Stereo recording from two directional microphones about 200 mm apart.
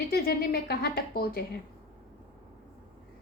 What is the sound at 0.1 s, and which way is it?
A woman's voice, 50° left (ahead or behind).